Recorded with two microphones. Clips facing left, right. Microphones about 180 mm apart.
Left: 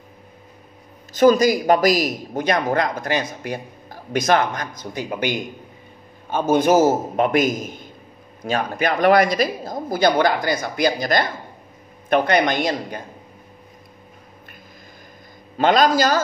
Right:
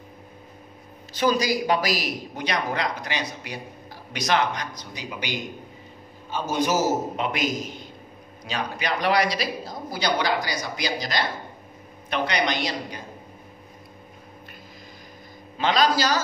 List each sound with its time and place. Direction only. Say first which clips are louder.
1.1 s a man's voice: left 8 dB; 45° left (ahead or behind)
15.5 s a man's voice: left 6 dB; 50° left (ahead or behind)